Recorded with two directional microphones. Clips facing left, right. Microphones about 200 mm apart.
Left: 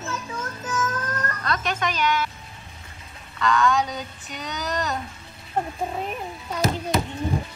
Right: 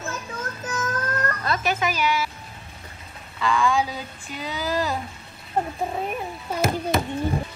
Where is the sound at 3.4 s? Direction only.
Centre (ahead or behind).